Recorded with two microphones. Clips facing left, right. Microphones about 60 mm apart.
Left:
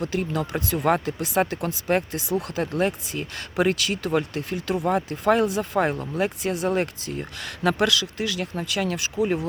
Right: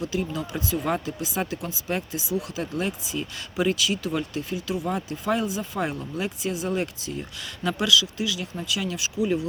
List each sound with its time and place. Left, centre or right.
0.0 s speech: left